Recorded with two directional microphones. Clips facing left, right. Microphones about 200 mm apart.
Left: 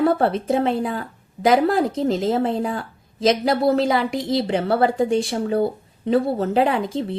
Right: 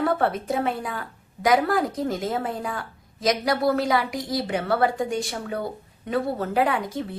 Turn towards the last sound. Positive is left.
turn(degrees=25)  # may be behind; listen again after turning